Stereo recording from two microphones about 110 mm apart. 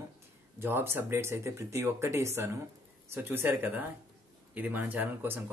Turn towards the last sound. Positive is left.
turn(degrees=-20)  # may be behind; listen again after turning